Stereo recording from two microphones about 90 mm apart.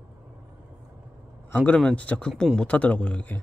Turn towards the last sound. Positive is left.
turn(degrees=15)  # may be behind; listen again after turning